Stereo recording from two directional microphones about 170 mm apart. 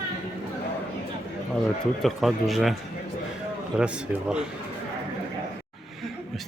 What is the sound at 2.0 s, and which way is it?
Speech, centre (ahead or behind).